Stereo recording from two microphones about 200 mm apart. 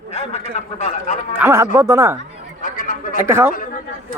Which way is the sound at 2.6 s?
40° left (ahead or behind).